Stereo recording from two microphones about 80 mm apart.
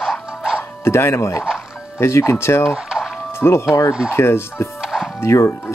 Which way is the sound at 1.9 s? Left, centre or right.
Left.